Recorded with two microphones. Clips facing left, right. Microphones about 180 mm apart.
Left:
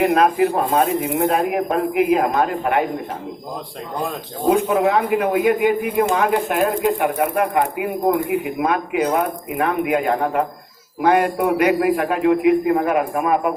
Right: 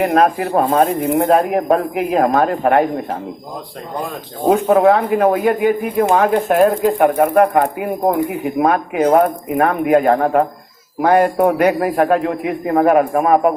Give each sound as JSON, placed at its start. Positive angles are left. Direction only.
{"t": 0.0, "sound": "speech", "side_deg": -45}
{"t": 4.4, "sound": "speech", "side_deg": -45}